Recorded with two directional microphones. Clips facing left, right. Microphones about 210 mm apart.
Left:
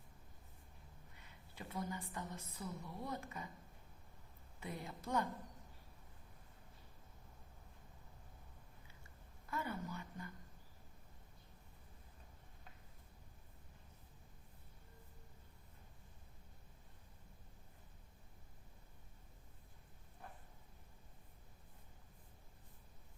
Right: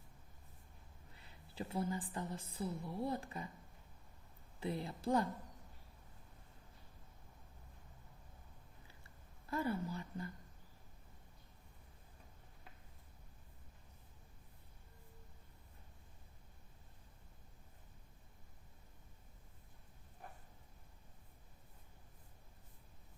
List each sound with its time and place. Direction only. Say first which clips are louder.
1.2 s a woman's voice: right 7 dB; 30° right (ahead or behind)
4.6 s a woman's voice: right 7 dB; 30° right (ahead or behind)
9.0 s a sound: right 5 dB; 35° right (ahead or behind)